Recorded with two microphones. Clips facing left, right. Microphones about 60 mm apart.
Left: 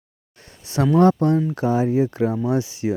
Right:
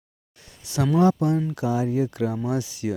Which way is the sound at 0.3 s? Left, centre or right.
Left.